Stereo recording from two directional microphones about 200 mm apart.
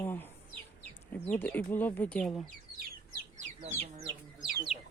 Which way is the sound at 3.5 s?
30° right (ahead or behind).